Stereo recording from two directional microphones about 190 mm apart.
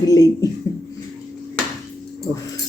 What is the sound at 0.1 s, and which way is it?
Speech, 20° left (ahead or behind).